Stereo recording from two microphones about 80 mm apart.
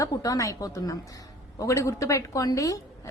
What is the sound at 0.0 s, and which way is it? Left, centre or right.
A woman's voice, left.